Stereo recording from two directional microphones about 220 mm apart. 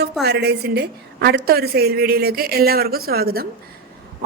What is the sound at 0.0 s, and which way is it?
Speech, 50° right (ahead or behind).